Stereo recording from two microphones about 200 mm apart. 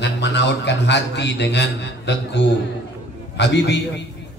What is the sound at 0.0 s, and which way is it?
A man's voice, 60° left (ahead or behind).